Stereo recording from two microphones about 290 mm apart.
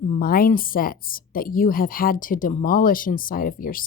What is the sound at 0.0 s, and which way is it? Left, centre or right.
A woman's voice, left.